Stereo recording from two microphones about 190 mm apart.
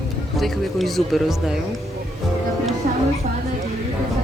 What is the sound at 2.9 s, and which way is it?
Music, 45° right (ahead or behind).